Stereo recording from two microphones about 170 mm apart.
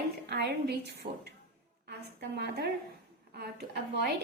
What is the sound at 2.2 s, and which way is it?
A woman's voice, 75° right (ahead or behind).